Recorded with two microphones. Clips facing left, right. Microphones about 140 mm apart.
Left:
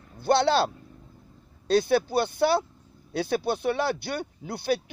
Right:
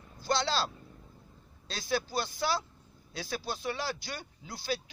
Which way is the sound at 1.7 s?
60° left (ahead or behind).